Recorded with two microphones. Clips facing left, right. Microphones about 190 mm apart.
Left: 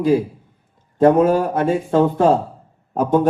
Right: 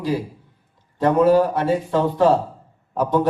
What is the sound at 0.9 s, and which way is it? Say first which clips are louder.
A man's voice: left 2 dB; 50° left (ahead or behind).